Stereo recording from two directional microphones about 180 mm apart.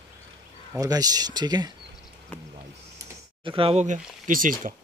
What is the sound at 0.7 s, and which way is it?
Speech, 20° right (ahead or behind).